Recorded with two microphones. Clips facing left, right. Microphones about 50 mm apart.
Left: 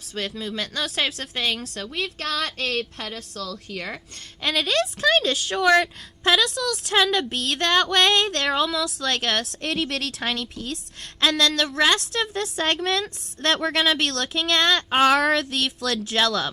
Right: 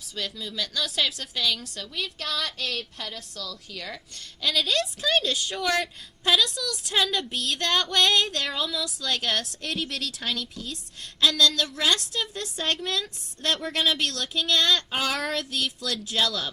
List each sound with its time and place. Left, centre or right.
0.2 s a woman's voice: left
0.8 s a woman's voice: left
4.4 s a woman's voice: left
8.3 s a woman's voice: left
11.2 s a woman's voice: left